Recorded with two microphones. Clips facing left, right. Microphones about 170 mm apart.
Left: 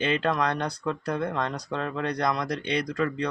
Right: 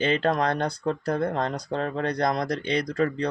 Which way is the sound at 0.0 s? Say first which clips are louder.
Right 2 dB; 35° right (ahead or behind).